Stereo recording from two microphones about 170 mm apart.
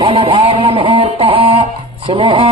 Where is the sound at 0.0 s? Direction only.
35° right (ahead or behind).